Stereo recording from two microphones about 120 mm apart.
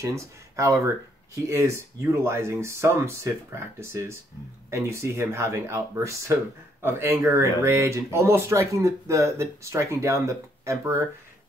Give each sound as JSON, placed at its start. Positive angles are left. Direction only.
{"t": 0.0, "sound": "speech", "side_deg": -25}